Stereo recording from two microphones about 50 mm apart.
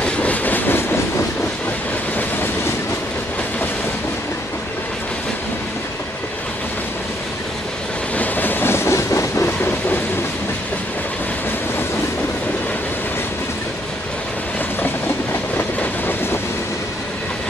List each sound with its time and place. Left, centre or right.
0.0 s train: left
8.2 s vehicle: left
9.6 s train: left
15.8 s train: left